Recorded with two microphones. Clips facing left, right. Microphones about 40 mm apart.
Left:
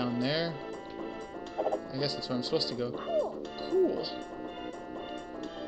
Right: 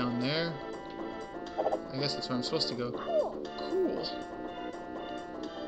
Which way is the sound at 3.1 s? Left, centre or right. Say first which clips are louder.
Right 2 dB; left.